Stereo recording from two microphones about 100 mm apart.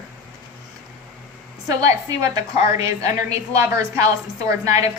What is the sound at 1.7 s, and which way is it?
A woman's voice, 40° right (ahead or behind).